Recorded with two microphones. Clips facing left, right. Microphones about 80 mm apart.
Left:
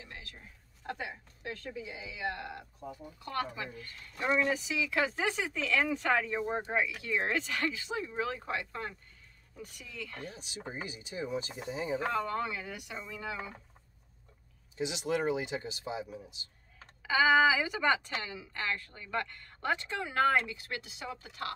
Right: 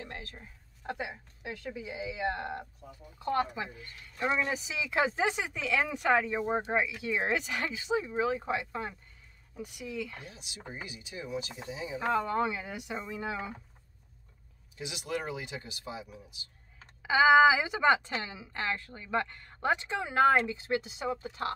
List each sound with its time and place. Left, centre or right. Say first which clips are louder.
0.0 s a sound: right 6 dB; right
0.8 s a woman's voice: right 2 dB; centre
4.6 s speech: right 1 dB; right
10.3 s speech: left 3 dB; left
12.1 s a woman's voice: right 4 dB; centre
14.8 s speech: left 4 dB; left
17.0 s a woman's voice: right 4 dB; right